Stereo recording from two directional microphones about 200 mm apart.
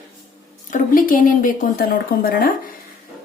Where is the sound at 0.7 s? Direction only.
45° left (ahead or behind).